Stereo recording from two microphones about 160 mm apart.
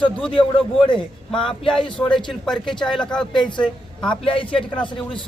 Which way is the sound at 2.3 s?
Centre (ahead or behind).